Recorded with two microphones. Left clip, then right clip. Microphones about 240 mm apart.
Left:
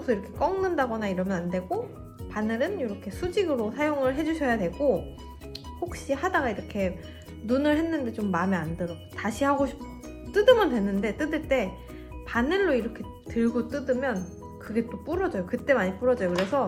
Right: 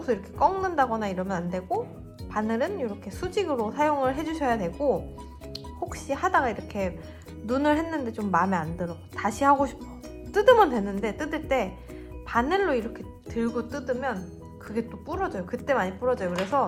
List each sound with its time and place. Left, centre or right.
0.0 s a woman's voice: right